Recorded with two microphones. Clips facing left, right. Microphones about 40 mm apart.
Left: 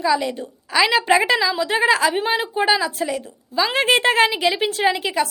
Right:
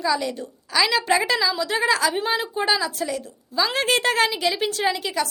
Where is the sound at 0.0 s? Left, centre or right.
Centre.